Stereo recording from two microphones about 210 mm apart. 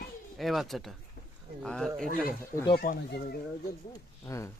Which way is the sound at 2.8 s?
45° left (ahead or behind).